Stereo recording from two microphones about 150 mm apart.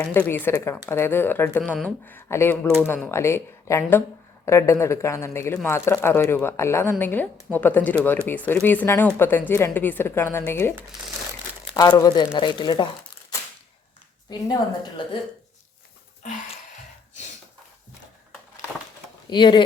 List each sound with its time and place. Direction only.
0.0 s speech: 15° left (ahead or behind); by 12.9 s 30° left (ahead or behind)
14.3 s speech: 25° left (ahead or behind)
19.3 s speech: 30° left (ahead or behind)